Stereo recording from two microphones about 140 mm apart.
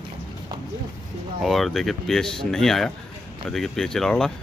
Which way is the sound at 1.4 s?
Centre (ahead or behind).